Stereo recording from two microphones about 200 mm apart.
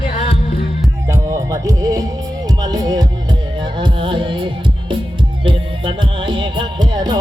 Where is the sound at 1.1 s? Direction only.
15° right (ahead or behind).